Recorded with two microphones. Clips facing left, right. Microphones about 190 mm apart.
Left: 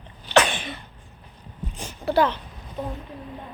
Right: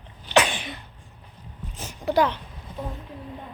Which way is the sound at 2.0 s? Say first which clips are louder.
Left 1 dB; 15° right (ahead or behind).